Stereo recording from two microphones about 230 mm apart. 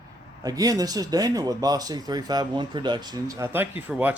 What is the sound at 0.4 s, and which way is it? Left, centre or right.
Speech, centre.